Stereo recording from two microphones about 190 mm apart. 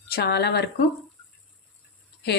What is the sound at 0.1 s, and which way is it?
Speech, 60° left (ahead or behind).